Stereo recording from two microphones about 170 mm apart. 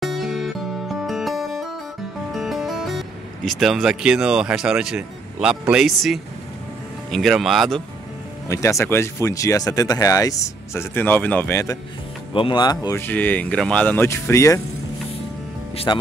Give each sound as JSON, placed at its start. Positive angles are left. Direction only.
{"t": 0.0, "sound": "music", "side_deg": 0}
{"t": 3.4, "sound": "speech", "side_deg": 0}
{"t": 8.5, "sound": "speech", "side_deg": 15}
{"t": 12.4, "sound": "speech", "side_deg": 30}
{"t": 15.7, "sound": "speech", "side_deg": 35}